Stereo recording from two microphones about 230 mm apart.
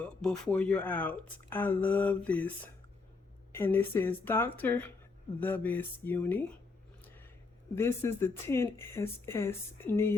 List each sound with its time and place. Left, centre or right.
0.0 s speech: centre
3.5 s speech: centre
7.8 s speech: centre